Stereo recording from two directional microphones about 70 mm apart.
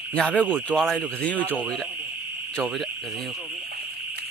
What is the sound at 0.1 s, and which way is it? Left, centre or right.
Speech, centre.